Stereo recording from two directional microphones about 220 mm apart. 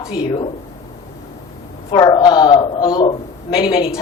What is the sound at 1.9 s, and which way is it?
A man's voice, 20° left (ahead or behind).